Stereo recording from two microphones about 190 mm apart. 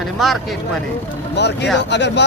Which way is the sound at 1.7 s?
65° left (ahead or behind).